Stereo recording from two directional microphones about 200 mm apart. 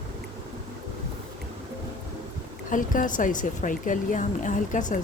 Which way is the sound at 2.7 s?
40° left (ahead or behind).